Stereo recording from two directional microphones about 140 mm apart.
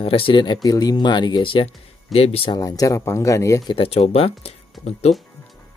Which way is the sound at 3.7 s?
45° left (ahead or behind).